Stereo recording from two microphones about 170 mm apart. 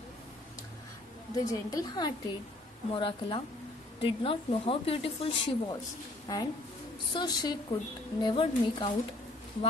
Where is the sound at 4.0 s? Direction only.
30° left (ahead or behind).